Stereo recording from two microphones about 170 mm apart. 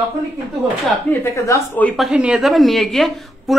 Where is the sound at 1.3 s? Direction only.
20° left (ahead or behind).